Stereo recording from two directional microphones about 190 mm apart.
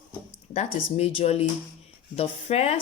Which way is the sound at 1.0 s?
30° left (ahead or behind).